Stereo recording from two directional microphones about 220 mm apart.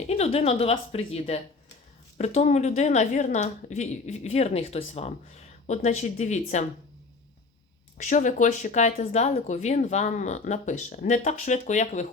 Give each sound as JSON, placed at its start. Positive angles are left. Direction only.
{"t": 0.1, "sound": "a woman's voice", "side_deg": 30}
{"t": 8.0, "sound": "a woman's voice", "side_deg": 35}